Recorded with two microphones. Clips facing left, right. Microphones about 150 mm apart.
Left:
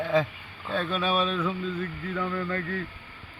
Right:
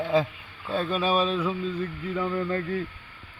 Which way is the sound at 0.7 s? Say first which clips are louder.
Right 2 dB; 35° right (ahead or behind).